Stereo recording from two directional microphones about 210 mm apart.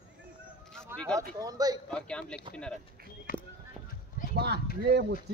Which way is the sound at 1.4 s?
15° right (ahead or behind).